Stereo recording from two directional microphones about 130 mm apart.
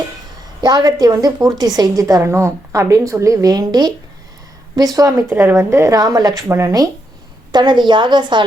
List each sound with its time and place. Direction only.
0.6 s a woman's voice: 30° right (ahead or behind)
4.9 s a woman's voice: 25° right (ahead or behind)